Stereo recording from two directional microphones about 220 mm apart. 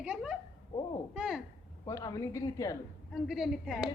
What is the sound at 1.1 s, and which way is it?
Speech, 5° right (ahead or behind).